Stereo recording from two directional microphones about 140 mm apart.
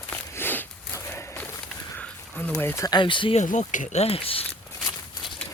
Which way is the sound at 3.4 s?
65° left (ahead or behind).